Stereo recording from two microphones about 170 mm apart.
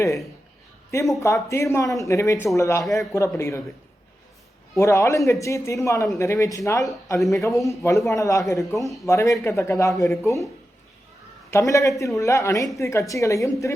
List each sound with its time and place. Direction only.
0.9 s speech: 15° left (ahead or behind)
4.7 s speech: 15° left (ahead or behind)
11.5 s speech: 20° left (ahead or behind)